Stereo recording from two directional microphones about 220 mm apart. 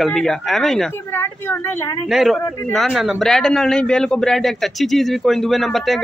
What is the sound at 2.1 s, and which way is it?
A man's voice, centre (ahead or behind).